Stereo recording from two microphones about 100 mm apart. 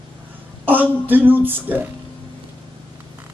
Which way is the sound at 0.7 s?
20° right (ahead or behind).